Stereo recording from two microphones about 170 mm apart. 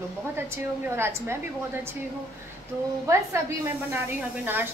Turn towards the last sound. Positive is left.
turn(degrees=-10)  # may be behind; listen again after turning